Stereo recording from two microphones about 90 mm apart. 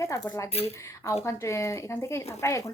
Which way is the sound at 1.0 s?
35° left (ahead or behind).